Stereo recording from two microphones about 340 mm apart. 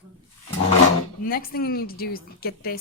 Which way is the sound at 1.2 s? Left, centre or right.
Left.